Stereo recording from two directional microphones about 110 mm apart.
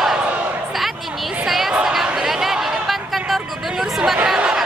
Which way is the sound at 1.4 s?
Centre (ahead or behind).